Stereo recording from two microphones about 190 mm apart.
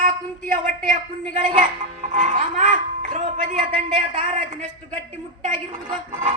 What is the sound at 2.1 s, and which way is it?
Speech, 40° right (ahead or behind).